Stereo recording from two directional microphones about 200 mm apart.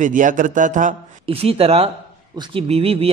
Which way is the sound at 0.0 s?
40° right (ahead or behind).